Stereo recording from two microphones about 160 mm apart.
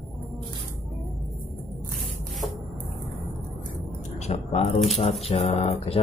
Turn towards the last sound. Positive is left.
turn(degrees=40)  # may be behind; listen again after turning